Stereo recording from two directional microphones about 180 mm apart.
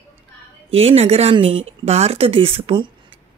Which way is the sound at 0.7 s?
35° right (ahead or behind).